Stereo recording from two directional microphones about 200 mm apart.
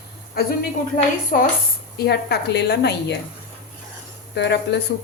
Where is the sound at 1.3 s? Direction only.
40° left (ahead or behind).